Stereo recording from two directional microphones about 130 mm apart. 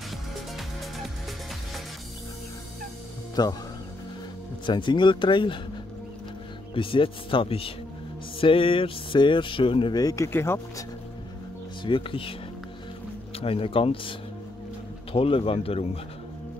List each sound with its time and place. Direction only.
0.3 s music: centre (ahead or behind)
3.4 s speech: 35° left (ahead or behind)
4.6 s speech: 35° left (ahead or behind)
6.7 s speech: 45° left (ahead or behind); by 10.9 s 20° left (ahead or behind)
11.8 s speech: 40° left (ahead or behind)
13.4 s speech: 45° left (ahead or behind)
15.1 s speech: 45° left (ahead or behind)